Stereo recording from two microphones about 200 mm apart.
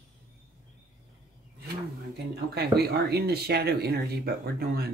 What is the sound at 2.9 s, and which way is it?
Speech, 50° right (ahead or behind).